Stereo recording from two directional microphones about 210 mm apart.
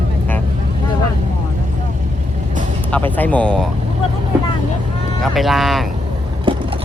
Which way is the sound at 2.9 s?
10° left (ahead or behind).